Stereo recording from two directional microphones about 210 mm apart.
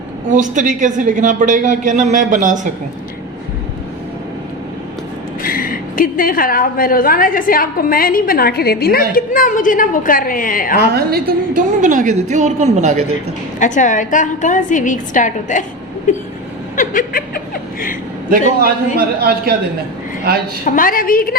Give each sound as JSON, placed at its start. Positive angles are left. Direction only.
{"t": 0.3, "sound": "speech", "side_deg": -35}
{"t": 5.4, "sound": "a woman's voice", "side_deg": 40}
{"t": 10.9, "sound": "speech", "side_deg": -45}
{"t": 13.6, "sound": "a woman's voice", "side_deg": 35}
{"t": 16.7, "sound": "chuckle", "side_deg": 40}
{"t": 18.9, "sound": "a man's voice", "side_deg": -45}
{"t": 20.7, "sound": "a woman's voice", "side_deg": 40}